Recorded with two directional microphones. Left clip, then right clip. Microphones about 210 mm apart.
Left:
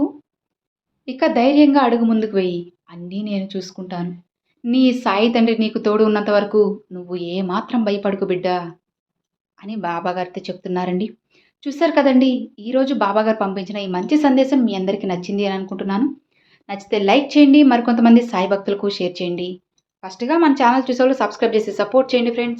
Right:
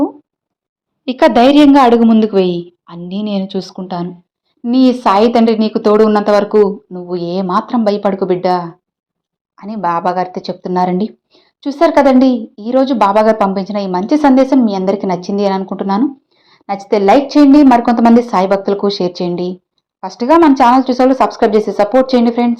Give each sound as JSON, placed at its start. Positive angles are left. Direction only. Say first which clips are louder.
{"t": 1.0, "sound": "a woman's voice", "louder": "right 8 dB", "side_deg": -40}